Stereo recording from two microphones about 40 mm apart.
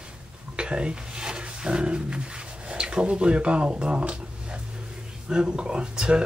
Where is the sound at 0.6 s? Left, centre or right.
Right.